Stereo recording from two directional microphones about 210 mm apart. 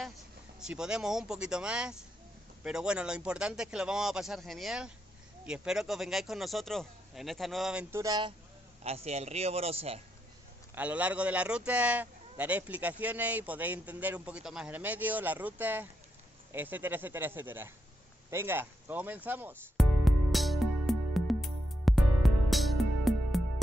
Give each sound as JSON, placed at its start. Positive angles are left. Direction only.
{"t": 0.6, "sound": "speech", "side_deg": -5}
{"t": 7.9, "sound": "a man's voice", "side_deg": -15}
{"t": 8.8, "sound": "a man's voice", "side_deg": -30}
{"t": 10.7, "sound": "a man's voice", "side_deg": -5}
{"t": 18.3, "sound": "music", "side_deg": -10}